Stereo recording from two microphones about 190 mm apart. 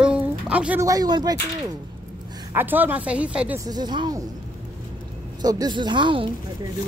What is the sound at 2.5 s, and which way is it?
A woman's voice, 10° right (ahead or behind).